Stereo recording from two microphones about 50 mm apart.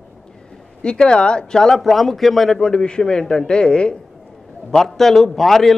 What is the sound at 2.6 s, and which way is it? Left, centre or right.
A man's voice, centre.